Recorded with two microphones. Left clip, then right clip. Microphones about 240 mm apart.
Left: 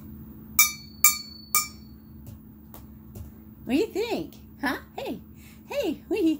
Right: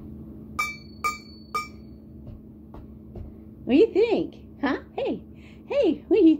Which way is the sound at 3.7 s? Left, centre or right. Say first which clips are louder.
Right 7 dB; left.